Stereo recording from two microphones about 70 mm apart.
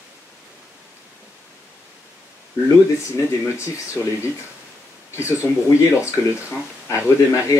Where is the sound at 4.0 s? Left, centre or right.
Left.